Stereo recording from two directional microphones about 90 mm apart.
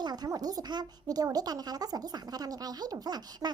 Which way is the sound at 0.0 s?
50° right (ahead or behind).